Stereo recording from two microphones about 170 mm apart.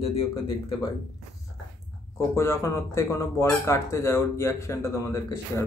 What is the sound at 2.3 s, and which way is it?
Speech, 15° left (ahead or behind).